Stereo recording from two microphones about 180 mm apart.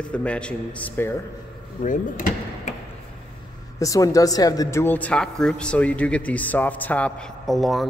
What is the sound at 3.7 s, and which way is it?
A man's voice, 20° left (ahead or behind).